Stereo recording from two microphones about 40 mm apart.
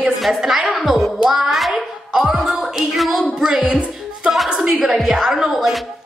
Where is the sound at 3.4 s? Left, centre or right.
Right.